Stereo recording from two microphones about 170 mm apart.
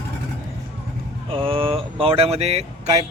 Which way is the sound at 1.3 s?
30° right (ahead or behind).